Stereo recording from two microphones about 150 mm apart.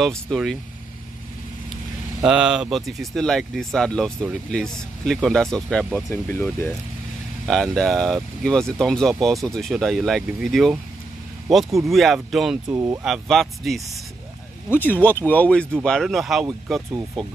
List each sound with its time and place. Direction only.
0.0 s speech: centre (ahead or behind)
2.2 s speech: 5° right (ahead or behind); by 6.7 s 15° left (ahead or behind)
7.4 s speech: 5° left (ahead or behind)
12.6 s speech: 25° right (ahead or behind)
13.0 s speech: centre (ahead or behind)
14.7 s speech: 15° left (ahead or behind)